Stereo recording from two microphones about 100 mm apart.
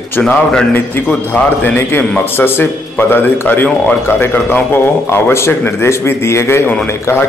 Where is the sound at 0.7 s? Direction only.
20° left (ahead or behind).